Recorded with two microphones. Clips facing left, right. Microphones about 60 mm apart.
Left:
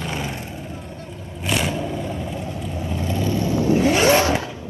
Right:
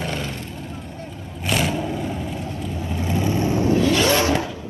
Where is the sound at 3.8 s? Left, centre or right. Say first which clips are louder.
Left 4 dB; left.